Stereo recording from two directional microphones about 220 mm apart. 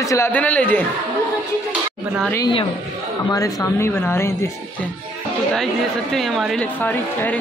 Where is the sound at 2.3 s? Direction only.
20° left (ahead or behind).